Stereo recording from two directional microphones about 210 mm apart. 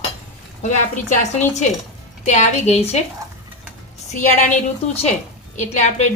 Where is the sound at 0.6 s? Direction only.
35° left (ahead or behind).